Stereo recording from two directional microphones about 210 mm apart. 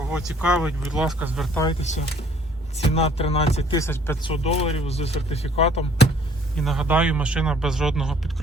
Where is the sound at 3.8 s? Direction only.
10° left (ahead or behind).